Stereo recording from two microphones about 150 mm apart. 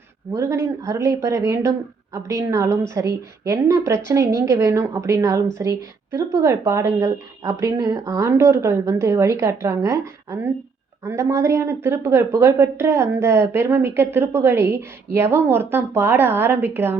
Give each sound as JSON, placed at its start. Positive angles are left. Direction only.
{"t": 0.3, "sound": "a woman's voice", "side_deg": -20}